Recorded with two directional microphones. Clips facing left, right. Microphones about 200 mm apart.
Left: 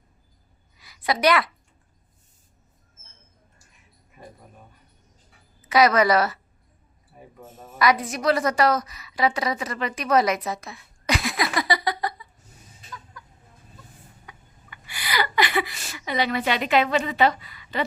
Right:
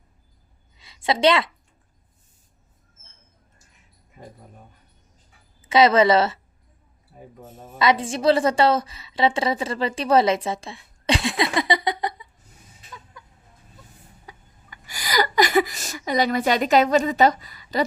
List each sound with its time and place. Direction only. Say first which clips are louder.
0.8 s a woman's voice: right 3 dB; 25° right (ahead or behind)
5.6 s a woman's voice: right 2 dB; 25° right (ahead or behind)
7.6 s a woman's voice: right 1 dB; 25° right (ahead or behind)
13.2 s chicken: even; 25° right (ahead or behind)
14.3 s a sound: right 4 dB; 40° right (ahead or behind)